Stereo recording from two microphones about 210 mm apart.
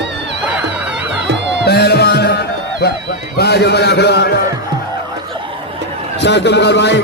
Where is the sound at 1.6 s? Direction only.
50° left (ahead or behind).